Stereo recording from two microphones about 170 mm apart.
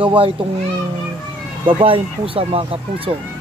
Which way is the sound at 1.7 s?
30° right (ahead or behind).